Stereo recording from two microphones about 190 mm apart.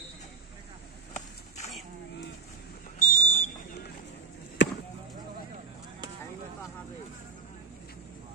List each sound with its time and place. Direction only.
3.0 s fire alarm: 35° left (ahead or behind)
4.6 s basketball bounce: 75° left (ahead or behind)